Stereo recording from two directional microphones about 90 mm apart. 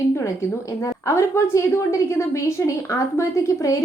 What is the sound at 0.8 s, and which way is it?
A woman's voice, 30° left (ahead or behind).